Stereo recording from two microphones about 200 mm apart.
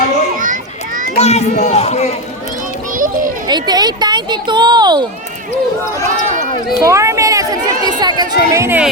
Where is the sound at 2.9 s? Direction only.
40° right (ahead or behind).